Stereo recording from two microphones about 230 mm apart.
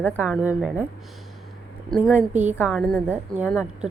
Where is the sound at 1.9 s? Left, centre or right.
Centre.